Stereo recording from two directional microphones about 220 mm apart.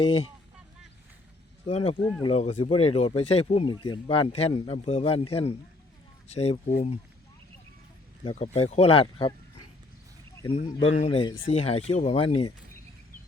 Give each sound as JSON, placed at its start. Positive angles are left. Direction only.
{"t": 0.0, "sound": "speech", "side_deg": 25}
{"t": 1.6, "sound": "speech", "side_deg": 30}
{"t": 8.2, "sound": "speech", "side_deg": 25}
{"t": 10.5, "sound": "speech", "side_deg": 30}